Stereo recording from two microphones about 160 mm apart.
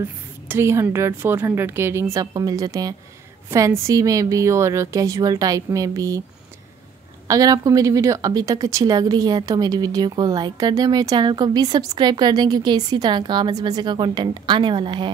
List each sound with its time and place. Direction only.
0.0 s a woman's voice: 15° right (ahead or behind)
7.2 s speech: 20° right (ahead or behind)